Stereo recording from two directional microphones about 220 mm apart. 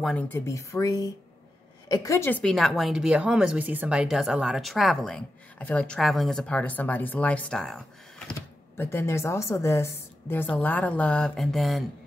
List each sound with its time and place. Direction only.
0.0 s a woman's voice: 5° left (ahead or behind)